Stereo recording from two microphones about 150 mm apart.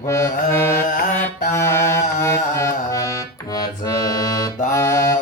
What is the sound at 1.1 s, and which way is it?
Carnatic music, 15° left (ahead or behind).